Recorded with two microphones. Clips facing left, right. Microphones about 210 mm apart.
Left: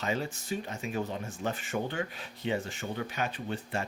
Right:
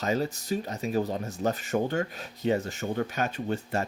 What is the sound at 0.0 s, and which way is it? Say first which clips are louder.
Speech: right 5 dB; 40° right (ahead or behind).